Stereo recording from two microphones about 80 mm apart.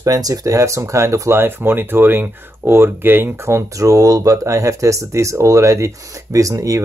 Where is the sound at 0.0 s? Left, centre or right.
Right.